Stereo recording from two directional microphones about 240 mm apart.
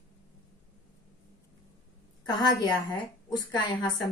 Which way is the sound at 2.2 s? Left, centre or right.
Centre.